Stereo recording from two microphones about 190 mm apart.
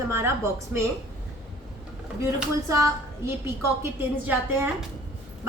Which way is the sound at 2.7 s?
15° right (ahead or behind).